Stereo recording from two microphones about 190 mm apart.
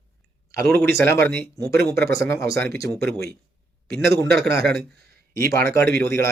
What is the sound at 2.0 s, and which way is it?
Speech, 15° left (ahead or behind).